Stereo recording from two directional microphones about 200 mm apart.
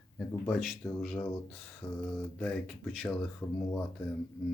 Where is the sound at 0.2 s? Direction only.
5° left (ahead or behind).